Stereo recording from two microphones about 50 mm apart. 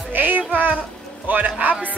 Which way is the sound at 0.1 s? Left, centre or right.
Right.